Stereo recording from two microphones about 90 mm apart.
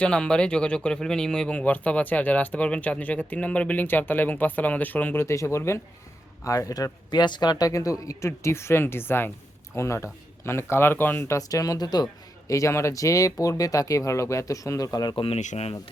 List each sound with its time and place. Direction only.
0.0 s speech: 10° left (ahead or behind)
5.2 s speech: 35° left (ahead or behind)
11.2 s speech: 40° left (ahead or behind)
12.5 s speech: 35° left (ahead or behind)
15.1 s speech: 80° left